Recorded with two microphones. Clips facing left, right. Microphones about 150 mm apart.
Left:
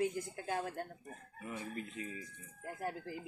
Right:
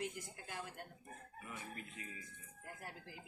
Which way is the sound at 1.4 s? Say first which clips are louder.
Left 8 dB; 25° left (ahead or behind).